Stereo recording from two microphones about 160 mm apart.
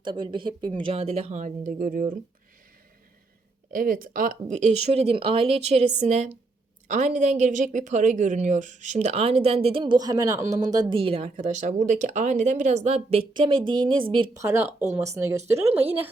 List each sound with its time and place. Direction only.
0.0 s speech: 30° right (ahead or behind)
0.9 s speech: 40° right (ahead or behind); by 2.1 s 60° right (ahead or behind)
3.7 s speech: 60° right (ahead or behind); by 14.3 s 30° right (ahead or behind)
14.3 s speech: 15° right (ahead or behind)